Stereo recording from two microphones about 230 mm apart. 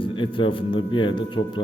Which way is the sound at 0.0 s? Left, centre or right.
Left.